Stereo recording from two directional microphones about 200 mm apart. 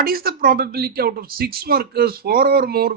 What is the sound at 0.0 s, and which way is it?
A woman's voice, 50° right (ahead or behind).